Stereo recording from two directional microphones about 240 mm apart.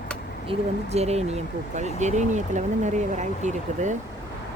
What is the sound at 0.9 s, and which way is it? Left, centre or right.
Speech, right.